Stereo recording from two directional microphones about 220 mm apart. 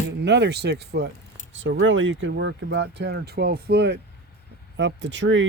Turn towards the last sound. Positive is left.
turn(degrees=-60)  # may be behind; listen again after turning